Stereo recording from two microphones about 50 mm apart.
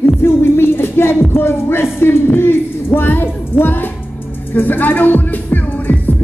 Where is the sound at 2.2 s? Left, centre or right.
Left.